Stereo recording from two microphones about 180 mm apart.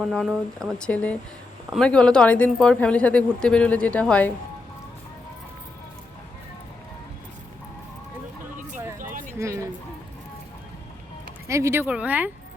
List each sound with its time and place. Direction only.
0.0 s speech: centre (ahead or behind)
9.0 s a sound: 45° right (ahead or behind)
9.4 s music: 15° right (ahead or behind)
11.4 s speech: 15° right (ahead or behind)